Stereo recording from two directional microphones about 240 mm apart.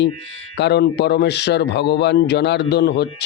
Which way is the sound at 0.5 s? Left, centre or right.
Left.